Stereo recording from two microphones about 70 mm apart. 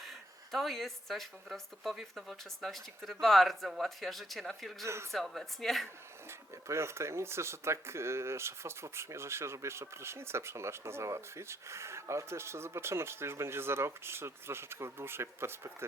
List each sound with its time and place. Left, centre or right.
0.0 s speech: centre
6.7 s speech: right